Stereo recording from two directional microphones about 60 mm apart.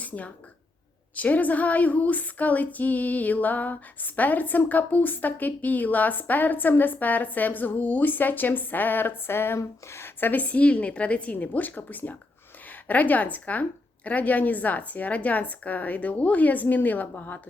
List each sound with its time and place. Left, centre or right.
0.0 s a sound: left
1.1 s speech: left
10.2 s speech: left